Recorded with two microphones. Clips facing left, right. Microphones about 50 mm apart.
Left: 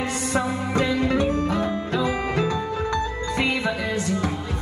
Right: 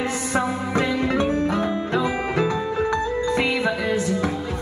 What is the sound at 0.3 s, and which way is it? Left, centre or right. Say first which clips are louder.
Music: right 1 dB; right.